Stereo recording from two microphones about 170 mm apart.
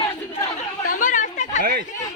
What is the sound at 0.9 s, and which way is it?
Chatter, 50° left (ahead or behind).